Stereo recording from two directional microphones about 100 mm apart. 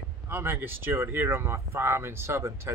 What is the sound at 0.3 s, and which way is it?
Speech, 20° right (ahead or behind).